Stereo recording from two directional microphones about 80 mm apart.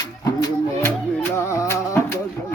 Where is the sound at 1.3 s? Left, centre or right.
Left.